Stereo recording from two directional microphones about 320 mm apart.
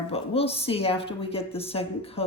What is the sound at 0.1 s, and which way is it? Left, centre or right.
Speech, centre.